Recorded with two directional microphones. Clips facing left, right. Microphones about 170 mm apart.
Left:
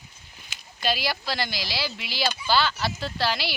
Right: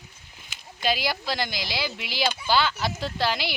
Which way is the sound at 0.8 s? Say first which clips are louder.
Right 1 dB; 20° right (ahead or behind).